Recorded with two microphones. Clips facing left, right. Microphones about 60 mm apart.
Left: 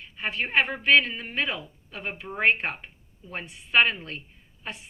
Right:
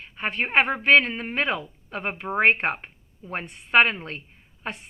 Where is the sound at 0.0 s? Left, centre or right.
Right.